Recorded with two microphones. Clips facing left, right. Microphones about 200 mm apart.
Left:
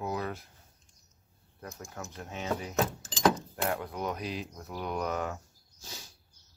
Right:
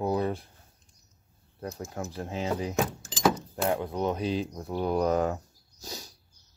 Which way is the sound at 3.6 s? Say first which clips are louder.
Right 5 dB; 25° right (ahead or behind).